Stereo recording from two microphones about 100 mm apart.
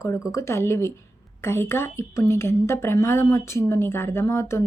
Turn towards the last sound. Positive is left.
turn(degrees=25)  # may be behind; listen again after turning